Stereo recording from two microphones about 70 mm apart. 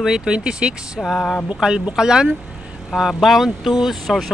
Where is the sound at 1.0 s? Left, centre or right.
Centre.